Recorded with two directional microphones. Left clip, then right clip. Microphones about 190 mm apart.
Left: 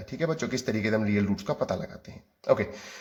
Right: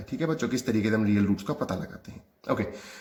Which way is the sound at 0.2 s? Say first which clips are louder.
Even; 20° left (ahead or behind).